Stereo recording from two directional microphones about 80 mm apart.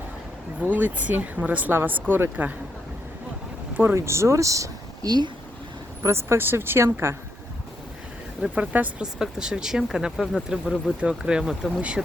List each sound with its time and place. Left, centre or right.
0.6 s speech: centre
3.8 s speech: right
8.4 s speech: centre